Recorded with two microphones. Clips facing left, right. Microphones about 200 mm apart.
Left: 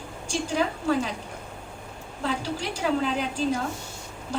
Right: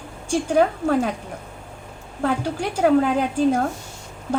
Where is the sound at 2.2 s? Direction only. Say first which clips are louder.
Right 6 dB; 55° right (ahead or behind).